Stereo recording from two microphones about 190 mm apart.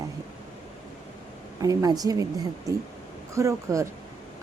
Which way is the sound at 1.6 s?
20° right (ahead or behind).